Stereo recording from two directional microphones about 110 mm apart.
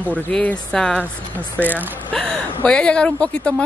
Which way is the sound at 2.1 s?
10° left (ahead or behind).